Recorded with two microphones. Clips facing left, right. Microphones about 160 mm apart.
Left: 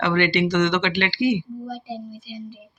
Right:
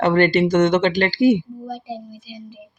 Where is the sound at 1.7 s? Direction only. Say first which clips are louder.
Right 1 dB; 15° right (ahead or behind).